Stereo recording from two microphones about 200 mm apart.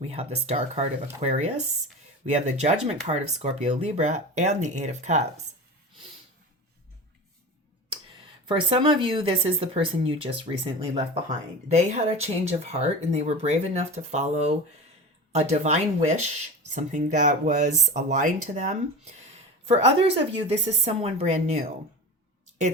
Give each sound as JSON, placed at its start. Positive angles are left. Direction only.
{"t": 0.0, "sound": "speech", "side_deg": -30}
{"t": 8.4, "sound": "speech", "side_deg": -25}